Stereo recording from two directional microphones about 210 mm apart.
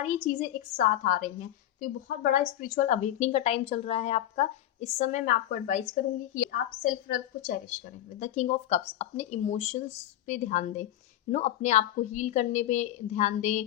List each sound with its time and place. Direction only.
0.0 s a woman's voice: 35° left (ahead or behind)